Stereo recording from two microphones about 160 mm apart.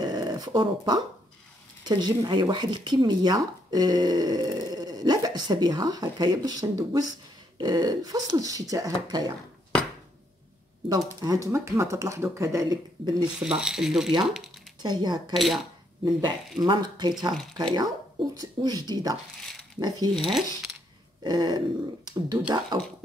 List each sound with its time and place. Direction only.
0.0 s a sound: 25° right (ahead or behind)
1.9 s speech: 25° right (ahead or behind)
11.1 s speech: 20° right (ahead or behind)
13.2 s speech: 5° right (ahead or behind)
14.8 s speech: 25° right (ahead or behind)
15.3 s speech: centre (ahead or behind)
16.6 s speech: 25° right (ahead or behind)
20.2 s speech: centre (ahead or behind)
21.2 s speech: 30° right (ahead or behind)